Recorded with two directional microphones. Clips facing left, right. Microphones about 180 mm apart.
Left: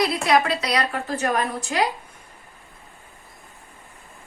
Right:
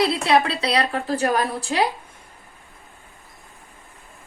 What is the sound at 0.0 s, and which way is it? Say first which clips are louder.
A woman's voice: right 1 dB; 30° right (ahead or behind).